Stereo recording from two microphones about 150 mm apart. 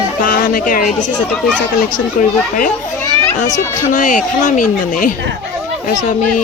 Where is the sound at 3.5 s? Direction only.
20° left (ahead or behind).